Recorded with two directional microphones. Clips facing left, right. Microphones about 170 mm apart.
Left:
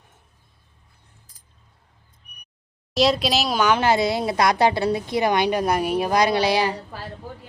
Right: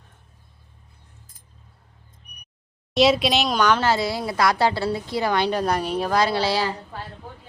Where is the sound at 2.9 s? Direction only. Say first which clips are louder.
Right 2 dB; centre (ahead or behind); by 6.7 s 15° left (ahead or behind).